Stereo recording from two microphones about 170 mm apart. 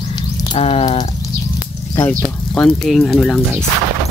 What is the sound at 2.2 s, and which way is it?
Speech, 5° left (ahead or behind).